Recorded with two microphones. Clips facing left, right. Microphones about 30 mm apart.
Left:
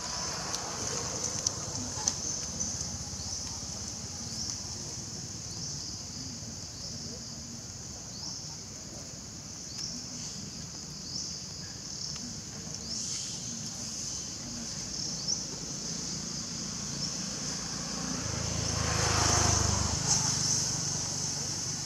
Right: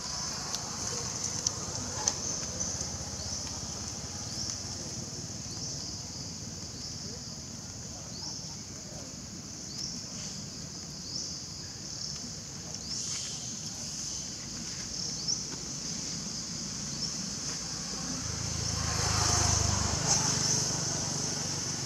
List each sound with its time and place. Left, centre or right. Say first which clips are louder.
0.2 s vehicle: left 1 dB; centre
15.9 s vehicle: even; centre
18.8 s vehicle: left 2 dB; left
19.3 s vehicle: left 2 dB; centre
19.6 s vehicle: even; centre